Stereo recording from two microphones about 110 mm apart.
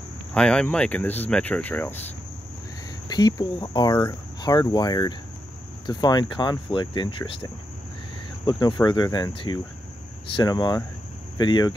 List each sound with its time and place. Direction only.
0.3 s speech: 10° left (ahead or behind)
3.1 s speech: 40° left (ahead or behind)
4.4 s cricket: 35° left (ahead or behind)
5.9 s speech: 40° left (ahead or behind); by 7.4 s 55° left (ahead or behind)
8.5 s cricket: 40° left (ahead or behind)